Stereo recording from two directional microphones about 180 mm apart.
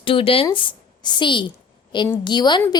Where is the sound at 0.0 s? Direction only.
30° left (ahead or behind).